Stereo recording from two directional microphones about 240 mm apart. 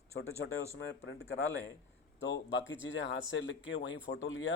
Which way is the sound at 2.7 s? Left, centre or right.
Left.